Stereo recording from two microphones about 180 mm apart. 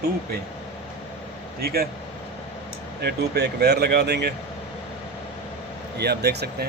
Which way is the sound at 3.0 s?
65° right (ahead or behind).